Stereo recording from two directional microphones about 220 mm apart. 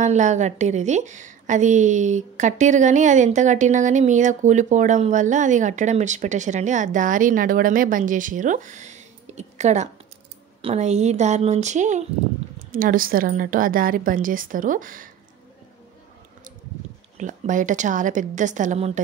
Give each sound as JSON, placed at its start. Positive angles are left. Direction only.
{"t": 0.0, "sound": "a woman's voice", "side_deg": -35}
{"t": 17.2, "sound": "a woman's voice", "side_deg": -35}